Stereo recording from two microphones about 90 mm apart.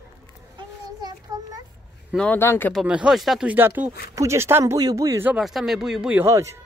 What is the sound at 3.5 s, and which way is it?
Speech, 15° right (ahead or behind).